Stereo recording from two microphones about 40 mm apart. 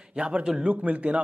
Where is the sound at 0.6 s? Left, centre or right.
Right.